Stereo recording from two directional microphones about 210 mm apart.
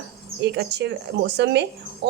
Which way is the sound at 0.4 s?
50° right (ahead or behind).